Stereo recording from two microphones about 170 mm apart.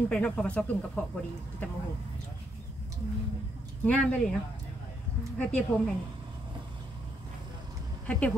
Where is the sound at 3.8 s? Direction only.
5° left (ahead or behind).